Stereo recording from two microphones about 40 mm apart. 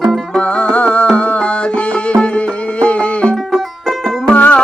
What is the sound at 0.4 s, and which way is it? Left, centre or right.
Music, left.